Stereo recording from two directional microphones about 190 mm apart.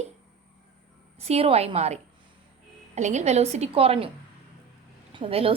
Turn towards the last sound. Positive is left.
turn(degrees=-30)  # may be behind; listen again after turning